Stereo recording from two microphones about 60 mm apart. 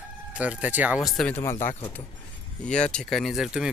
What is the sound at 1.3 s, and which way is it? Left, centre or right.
Speech, left.